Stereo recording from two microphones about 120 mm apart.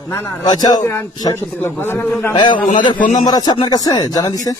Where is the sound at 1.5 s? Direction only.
20° left (ahead or behind).